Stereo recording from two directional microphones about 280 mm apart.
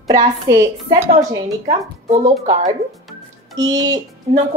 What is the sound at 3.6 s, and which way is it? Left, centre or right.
Speech, centre.